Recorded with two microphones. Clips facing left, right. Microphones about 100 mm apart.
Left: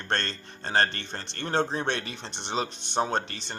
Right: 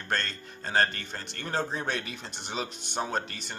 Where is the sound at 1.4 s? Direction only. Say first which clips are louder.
Left 4 dB; 30° left (ahead or behind).